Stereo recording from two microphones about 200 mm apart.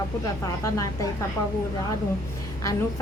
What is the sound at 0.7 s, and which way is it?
Speech, 15° left (ahead or behind).